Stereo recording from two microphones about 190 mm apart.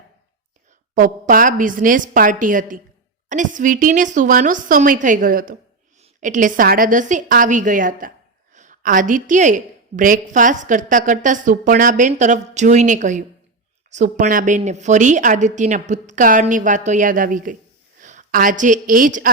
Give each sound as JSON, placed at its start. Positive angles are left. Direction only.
{"t": 0.9, "sound": "a woman's voice", "side_deg": -45}